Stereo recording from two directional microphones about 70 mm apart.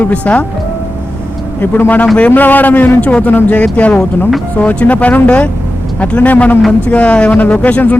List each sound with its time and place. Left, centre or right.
0.0 s a man's voice: centre
1.6 s a man's voice: left